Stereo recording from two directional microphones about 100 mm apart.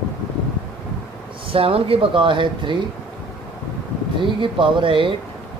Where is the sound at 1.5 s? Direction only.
70° right (ahead or behind).